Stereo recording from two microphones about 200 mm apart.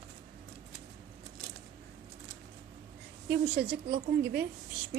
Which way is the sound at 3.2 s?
50° right (ahead or behind).